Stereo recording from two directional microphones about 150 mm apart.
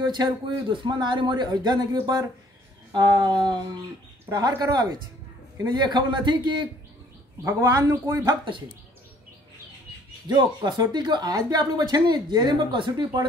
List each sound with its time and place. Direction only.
0.0 s a woman's voice: 30° right (ahead or behind)
7.4 s a woman's voice: 20° right (ahead or behind)
10.2 s a woman's voice: 30° right (ahead or behind)